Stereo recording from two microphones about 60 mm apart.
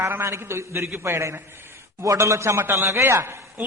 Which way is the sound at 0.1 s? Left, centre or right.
Right.